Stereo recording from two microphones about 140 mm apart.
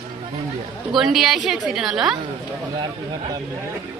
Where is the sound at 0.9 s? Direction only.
Centre (ahead or behind).